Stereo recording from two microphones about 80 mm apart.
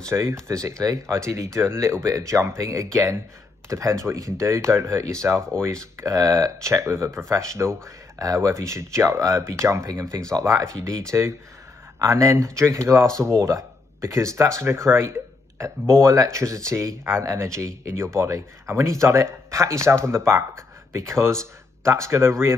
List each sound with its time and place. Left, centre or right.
0.1 s speech: right
5.2 s speech: right
5.6 s speech: right